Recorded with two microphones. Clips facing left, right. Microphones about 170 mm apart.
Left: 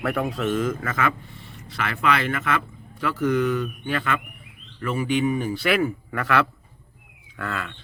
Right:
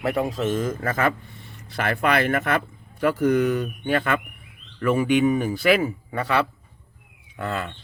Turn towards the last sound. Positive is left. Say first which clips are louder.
# right 3 dB
turn(degrees=-25)  # may be behind; listen again after turning